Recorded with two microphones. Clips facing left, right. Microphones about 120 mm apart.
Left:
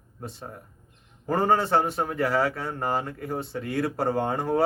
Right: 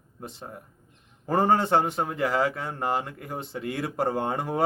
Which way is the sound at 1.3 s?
20° right (ahead or behind).